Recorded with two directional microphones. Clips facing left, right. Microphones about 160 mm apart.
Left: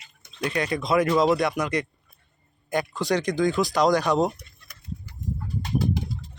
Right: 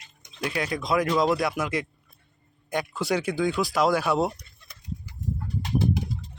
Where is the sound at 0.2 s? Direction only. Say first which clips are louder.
Left 2 dB; 5° right (ahead or behind).